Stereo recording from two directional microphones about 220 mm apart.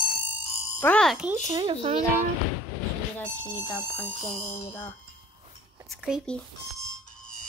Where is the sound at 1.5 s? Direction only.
25° right (ahead or behind).